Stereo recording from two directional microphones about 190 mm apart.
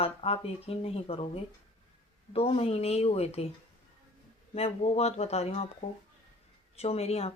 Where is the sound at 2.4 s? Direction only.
30° left (ahead or behind).